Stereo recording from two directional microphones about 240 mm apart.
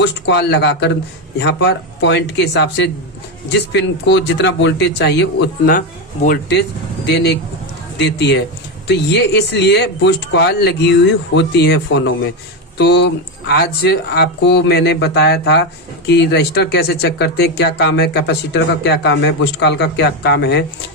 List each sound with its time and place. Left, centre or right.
0.0 s speech: left